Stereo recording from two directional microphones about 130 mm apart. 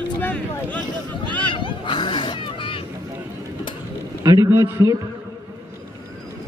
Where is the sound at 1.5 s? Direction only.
40° left (ahead or behind).